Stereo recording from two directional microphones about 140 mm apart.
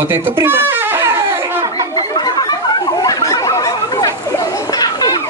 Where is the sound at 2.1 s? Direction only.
30° left (ahead or behind).